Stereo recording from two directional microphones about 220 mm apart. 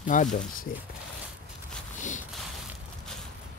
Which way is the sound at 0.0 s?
35° left (ahead or behind).